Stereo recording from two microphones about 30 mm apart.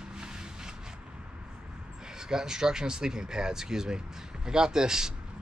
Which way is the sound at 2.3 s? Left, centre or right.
Right.